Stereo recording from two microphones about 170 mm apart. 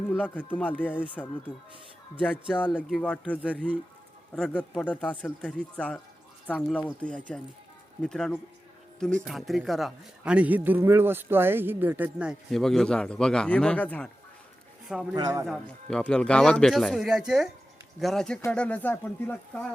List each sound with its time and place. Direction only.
0.1 s a man's voice: 10° left (ahead or behind)
14.8 s speech: 5° right (ahead or behind)
15.1 s a man's voice: 20° right (ahead or behind)
15.4 s a man's voice: centre (ahead or behind)